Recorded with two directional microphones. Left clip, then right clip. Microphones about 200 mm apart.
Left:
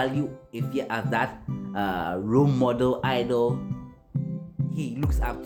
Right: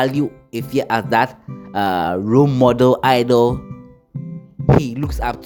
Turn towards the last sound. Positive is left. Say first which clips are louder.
# right 10 dB
turn(degrees=-50)  # may be behind; listen again after turning